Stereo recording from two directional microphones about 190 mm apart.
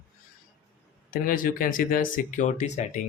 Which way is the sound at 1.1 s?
45° left (ahead or behind).